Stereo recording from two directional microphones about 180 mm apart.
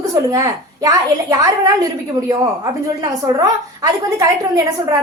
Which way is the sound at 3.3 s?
20° right (ahead or behind).